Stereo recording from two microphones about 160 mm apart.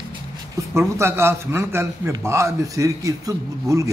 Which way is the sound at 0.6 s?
20° right (ahead or behind).